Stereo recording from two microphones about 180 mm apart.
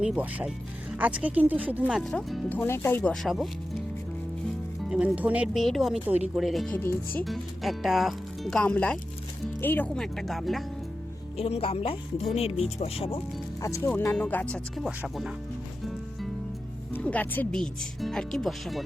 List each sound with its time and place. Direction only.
0.0 s speech: 5° right (ahead or behind)
2.6 s speech: 15° left (ahead or behind)
4.9 s speech: 5° right (ahead or behind)
6.7 s speech: 10° left (ahead or behind)
7.3 s speech: centre (ahead or behind)
11.3 s speech: 35° left (ahead or behind)
13.6 s speech: 15° left (ahead or behind); by 15.3 s centre (ahead or behind)
16.9 s speech: 10° left (ahead or behind)